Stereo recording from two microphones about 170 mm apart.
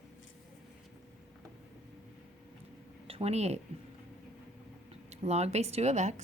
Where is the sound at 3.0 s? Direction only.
35° right (ahead or behind).